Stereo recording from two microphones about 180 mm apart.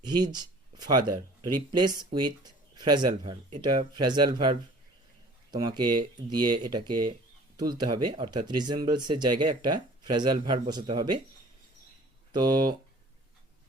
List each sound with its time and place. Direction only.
0.0 s speech: 25° right (ahead or behind)
12.3 s speech: 25° right (ahead or behind)